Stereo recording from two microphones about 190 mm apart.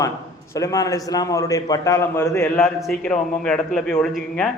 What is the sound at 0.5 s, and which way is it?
A man's voice, 15° left (ahead or behind).